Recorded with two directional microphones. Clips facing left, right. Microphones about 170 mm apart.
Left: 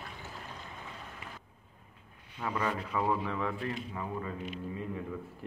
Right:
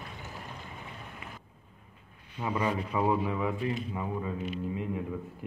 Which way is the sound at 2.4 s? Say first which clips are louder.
Right 3 dB; 15° right (ahead or behind).